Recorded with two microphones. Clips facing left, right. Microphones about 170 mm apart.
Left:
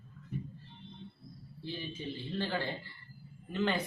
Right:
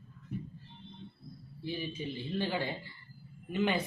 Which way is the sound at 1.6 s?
15° right (ahead or behind).